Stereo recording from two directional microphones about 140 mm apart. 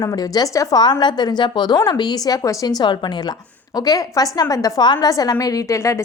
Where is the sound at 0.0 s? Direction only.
25° left (ahead or behind).